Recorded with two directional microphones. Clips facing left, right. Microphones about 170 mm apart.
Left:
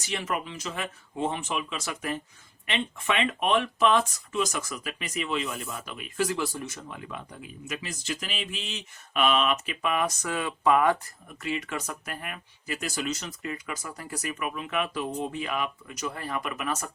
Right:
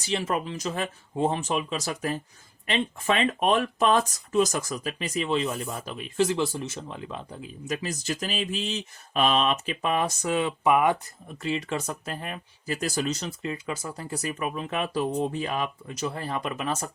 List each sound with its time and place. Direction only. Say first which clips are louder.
0.1 s speech: right 4 dB; 30° right (ahead or behind); by 10.9 s 15° right (ahead or behind)
11.4 s speech: right 3 dB; 30° right (ahead or behind)